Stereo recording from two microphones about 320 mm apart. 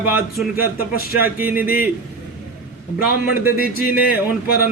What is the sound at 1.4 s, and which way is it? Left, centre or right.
Speech, centre.